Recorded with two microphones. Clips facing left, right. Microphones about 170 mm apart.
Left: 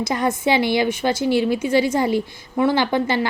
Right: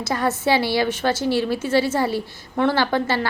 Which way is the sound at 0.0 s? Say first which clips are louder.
Left 1 dB; 15° left (ahead or behind).